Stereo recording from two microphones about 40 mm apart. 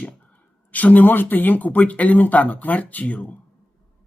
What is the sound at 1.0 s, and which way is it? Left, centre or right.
Speech, left.